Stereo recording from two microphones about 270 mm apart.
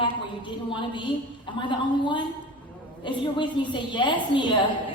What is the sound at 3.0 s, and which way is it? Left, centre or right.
A woman's voice, centre.